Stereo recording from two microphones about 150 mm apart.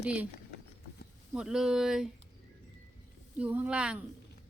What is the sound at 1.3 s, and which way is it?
Speech, 5° right (ahead or behind).